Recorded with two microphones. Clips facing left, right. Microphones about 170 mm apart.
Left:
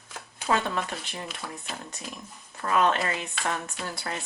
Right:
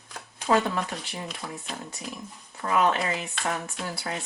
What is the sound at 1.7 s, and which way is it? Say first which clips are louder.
Speech: right 1 dB; centre (ahead or behind).